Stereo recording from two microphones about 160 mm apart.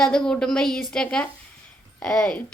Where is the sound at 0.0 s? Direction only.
5° left (ahead or behind).